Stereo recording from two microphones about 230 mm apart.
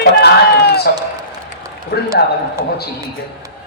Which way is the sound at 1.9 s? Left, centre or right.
Left.